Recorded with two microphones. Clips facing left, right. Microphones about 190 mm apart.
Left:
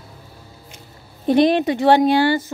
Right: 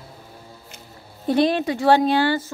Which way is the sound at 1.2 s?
20° left (ahead or behind).